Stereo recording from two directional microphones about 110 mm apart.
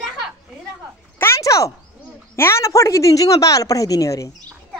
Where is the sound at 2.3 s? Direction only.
25° left (ahead or behind).